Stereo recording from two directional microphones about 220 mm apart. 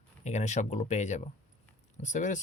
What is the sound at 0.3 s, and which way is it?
Speech, 30° left (ahead or behind).